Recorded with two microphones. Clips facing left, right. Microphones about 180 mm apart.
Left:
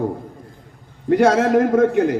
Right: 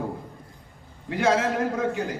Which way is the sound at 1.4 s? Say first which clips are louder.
Left 10 dB; 70° left (ahead or behind).